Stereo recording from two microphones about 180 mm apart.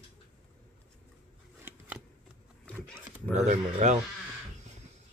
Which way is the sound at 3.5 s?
40° right (ahead or behind).